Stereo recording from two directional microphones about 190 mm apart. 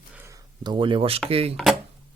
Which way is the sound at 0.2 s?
15° right (ahead or behind).